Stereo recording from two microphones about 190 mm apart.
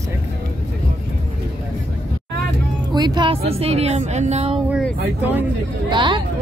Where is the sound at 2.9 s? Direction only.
20° right (ahead or behind).